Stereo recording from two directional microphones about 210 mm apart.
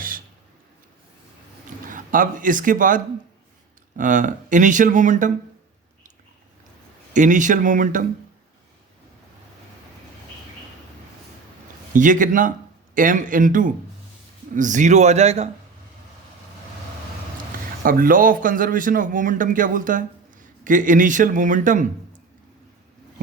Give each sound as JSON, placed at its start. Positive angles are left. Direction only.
{"t": 1.9, "sound": "a man's voice", "side_deg": -40}
{"t": 7.1, "sound": "a man's voice", "side_deg": -35}
{"t": 11.9, "sound": "a man's voice", "side_deg": -40}
{"t": 17.8, "sound": "a man's voice", "side_deg": -40}